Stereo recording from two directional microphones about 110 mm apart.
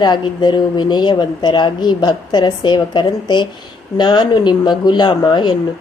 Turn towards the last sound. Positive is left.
turn(degrees=45)  # may be behind; listen again after turning